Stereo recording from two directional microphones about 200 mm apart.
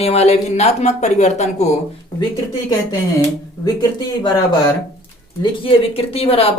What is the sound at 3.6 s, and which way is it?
Speech, 20° left (ahead or behind).